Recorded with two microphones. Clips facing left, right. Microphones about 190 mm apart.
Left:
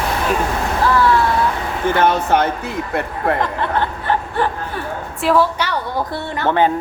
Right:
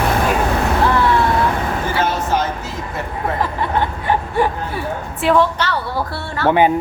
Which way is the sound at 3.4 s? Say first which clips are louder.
Even; 10° right (ahead or behind).